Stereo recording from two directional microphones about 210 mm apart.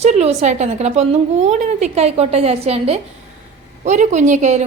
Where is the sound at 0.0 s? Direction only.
30° right (ahead or behind).